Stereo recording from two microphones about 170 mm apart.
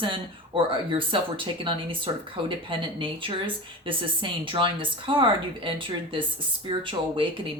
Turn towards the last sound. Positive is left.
turn(degrees=-30)  # may be behind; listen again after turning